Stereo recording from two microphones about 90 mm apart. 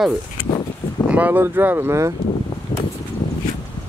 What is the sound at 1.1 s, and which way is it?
Speech, 20° right (ahead or behind).